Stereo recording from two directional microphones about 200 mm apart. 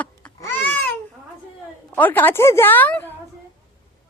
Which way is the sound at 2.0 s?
10° left (ahead or behind).